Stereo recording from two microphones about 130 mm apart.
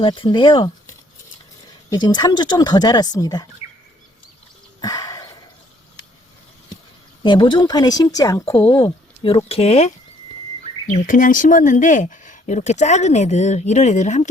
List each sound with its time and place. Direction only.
0.0 s speech: 40° left (ahead or behind)
1.9 s speech: 30° left (ahead or behind)
4.8 s a sound: 30° left (ahead or behind)
7.2 s speech: 40° left (ahead or behind)
9.5 s speech: 55° left (ahead or behind)
11.0 s speech: 90° left; by 14.3 s 65° left (ahead or behind)